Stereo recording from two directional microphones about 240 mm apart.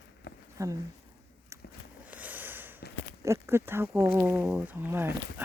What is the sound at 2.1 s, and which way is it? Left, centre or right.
Sniff, centre.